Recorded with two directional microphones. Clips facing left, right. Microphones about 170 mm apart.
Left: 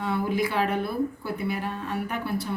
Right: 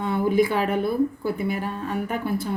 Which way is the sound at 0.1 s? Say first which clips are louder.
Right 6 dB; 50° right (ahead or behind).